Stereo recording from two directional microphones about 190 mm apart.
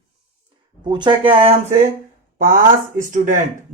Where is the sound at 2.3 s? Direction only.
45° right (ahead or behind).